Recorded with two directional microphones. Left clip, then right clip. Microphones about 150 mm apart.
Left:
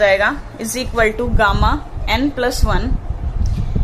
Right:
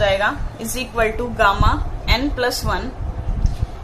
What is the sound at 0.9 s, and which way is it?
Speech, 45° left (ahead or behind).